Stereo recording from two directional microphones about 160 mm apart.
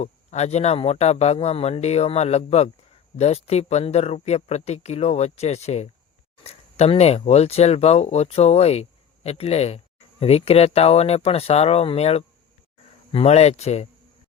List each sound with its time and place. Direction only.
0.0 s speech: 45° left (ahead or behind)